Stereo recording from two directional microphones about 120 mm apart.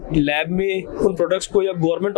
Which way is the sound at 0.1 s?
20° left (ahead or behind).